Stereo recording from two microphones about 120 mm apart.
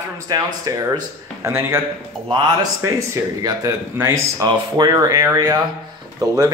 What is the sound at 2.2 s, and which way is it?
Speech, 40° right (ahead or behind).